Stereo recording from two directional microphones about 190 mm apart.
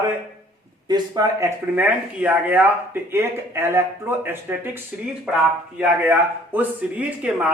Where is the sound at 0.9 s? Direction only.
20° right (ahead or behind).